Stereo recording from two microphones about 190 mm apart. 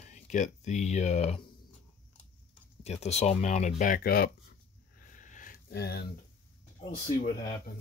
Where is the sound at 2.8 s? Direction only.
35° left (ahead or behind); by 4.3 s 50° left (ahead or behind).